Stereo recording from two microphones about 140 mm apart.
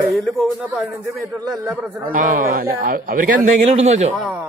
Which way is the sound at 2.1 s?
75° right (ahead or behind).